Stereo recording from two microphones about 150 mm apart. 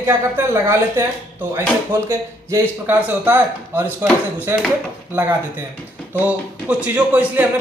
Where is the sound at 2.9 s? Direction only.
10° right (ahead or behind).